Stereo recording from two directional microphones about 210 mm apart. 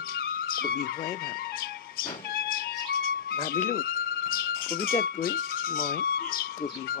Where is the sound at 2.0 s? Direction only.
45° left (ahead or behind).